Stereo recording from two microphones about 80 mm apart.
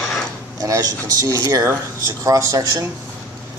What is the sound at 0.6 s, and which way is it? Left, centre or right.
A man's voice, right.